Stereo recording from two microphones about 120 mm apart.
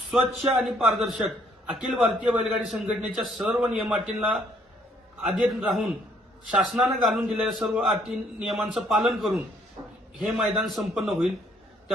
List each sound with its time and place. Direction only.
0.1 s a man's voice: centre (ahead or behind)
9.8 s a sound: 35° right (ahead or behind)
10.2 s a man's voice: 5° right (ahead or behind)